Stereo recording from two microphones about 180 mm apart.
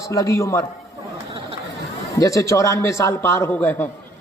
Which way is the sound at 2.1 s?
15° left (ahead or behind).